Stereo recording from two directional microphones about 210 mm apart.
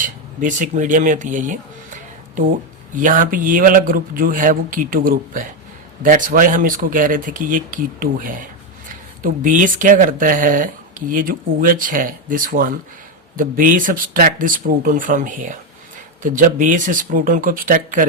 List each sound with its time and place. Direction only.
0.0 s a man's voice: 40° right (ahead or behind)